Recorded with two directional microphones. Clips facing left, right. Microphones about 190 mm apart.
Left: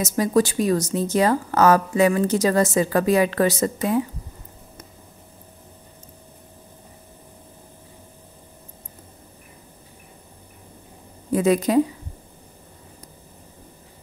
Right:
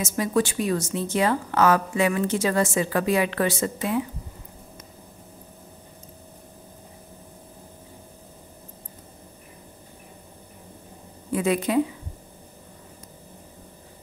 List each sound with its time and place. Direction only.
0.0 s a woman's voice: 40° left (ahead or behind)
11.3 s a woman's voice: 40° left (ahead or behind)